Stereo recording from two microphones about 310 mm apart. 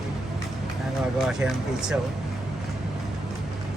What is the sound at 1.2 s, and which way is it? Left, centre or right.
Speech, centre.